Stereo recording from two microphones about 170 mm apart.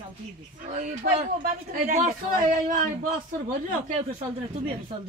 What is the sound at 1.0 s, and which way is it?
Speech, 50° right (ahead or behind).